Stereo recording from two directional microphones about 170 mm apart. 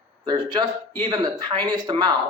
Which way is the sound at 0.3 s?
25° right (ahead or behind).